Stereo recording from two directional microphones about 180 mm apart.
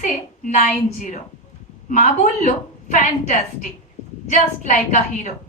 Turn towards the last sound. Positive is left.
turn(degrees=45)  # may be behind; listen again after turning